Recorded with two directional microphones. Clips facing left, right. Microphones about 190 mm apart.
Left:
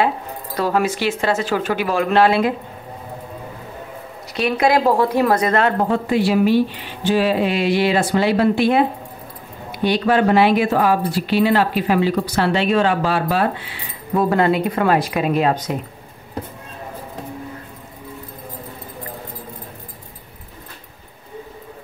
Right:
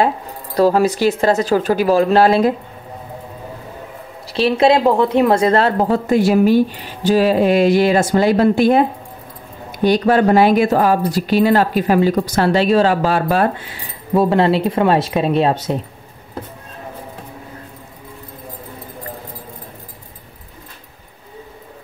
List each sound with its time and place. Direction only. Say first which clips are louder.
0.6 s speech: right 6 dB; 35° right (ahead or behind)
4.3 s a woman's voice: right 4 dB; 30° right (ahead or behind); by 13.7 s 45° right (ahead or behind)
14.1 s speech: right 3 dB; 25° right (ahead or behind)